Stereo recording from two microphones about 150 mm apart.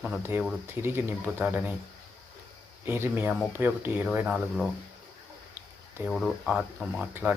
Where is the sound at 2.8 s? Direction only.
15° right (ahead or behind).